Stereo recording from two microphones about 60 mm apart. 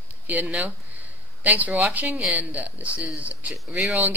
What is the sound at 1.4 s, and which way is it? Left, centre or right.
Speech, right.